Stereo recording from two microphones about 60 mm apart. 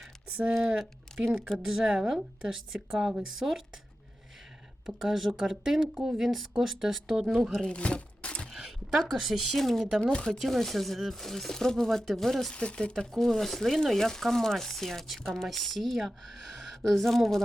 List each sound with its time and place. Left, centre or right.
0.8 s a woman's voice: centre
4.9 s a woman's voice: centre
7.6 s a sound: centre
8.5 s a sound: centre
9.1 s speech: centre
10.0 s speech: centre
10.3 s speech: centre
12.5 s speech: centre